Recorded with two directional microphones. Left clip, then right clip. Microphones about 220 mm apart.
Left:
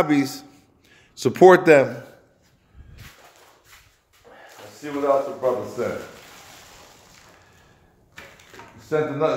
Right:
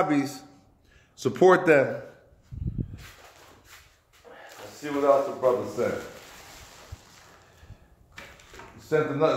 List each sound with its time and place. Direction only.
0.0 s speech: 30° left (ahead or behind)
4.8 s a man's voice: 5° left (ahead or behind)
8.7 s speech: 10° left (ahead or behind)